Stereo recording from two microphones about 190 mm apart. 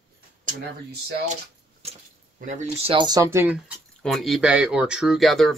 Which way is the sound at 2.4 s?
40° right (ahead or behind).